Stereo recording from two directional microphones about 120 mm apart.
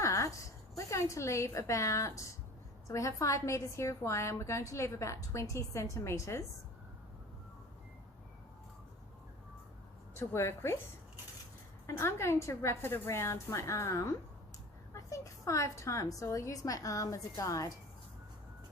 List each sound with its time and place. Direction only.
0.0 s a sound: 25° left (ahead or behind)
0.8 s a woman's voice: 25° left (ahead or behind)
10.2 s a woman's voice: 20° left (ahead or behind)
11.9 s a woman's voice: 20° left (ahead or behind)